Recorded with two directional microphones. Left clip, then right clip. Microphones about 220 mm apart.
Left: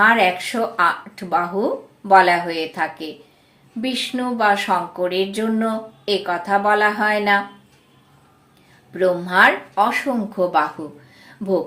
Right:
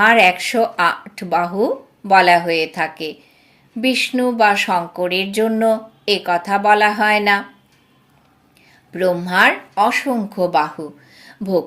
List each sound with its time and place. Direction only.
0.0 s speech: 40° right (ahead or behind)
8.9 s speech: 40° right (ahead or behind)